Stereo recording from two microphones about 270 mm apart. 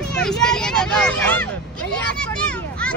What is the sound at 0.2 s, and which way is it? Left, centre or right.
Speech, centre.